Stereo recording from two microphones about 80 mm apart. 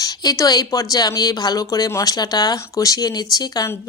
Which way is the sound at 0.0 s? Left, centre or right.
Left.